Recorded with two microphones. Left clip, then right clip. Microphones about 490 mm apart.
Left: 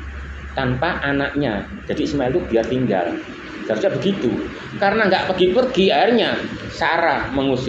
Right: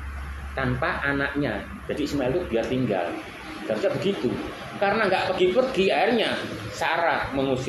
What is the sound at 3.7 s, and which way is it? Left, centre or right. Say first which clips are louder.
Speech: left 6 dB; right.